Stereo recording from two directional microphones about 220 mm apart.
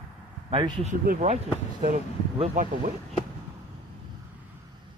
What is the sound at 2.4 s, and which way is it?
Speech, 35° right (ahead or behind).